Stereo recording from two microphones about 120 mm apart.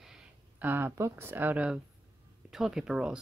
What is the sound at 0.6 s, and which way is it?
Speech, 15° right (ahead or behind).